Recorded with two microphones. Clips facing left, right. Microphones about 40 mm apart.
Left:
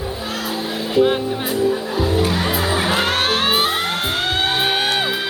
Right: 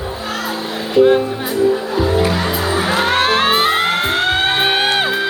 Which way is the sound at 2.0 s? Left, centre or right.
Right.